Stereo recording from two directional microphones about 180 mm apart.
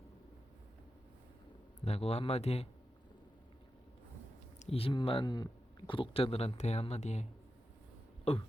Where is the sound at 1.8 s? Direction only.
35° left (ahead or behind).